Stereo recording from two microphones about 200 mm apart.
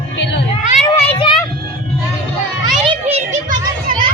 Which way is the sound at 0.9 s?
25° left (ahead or behind).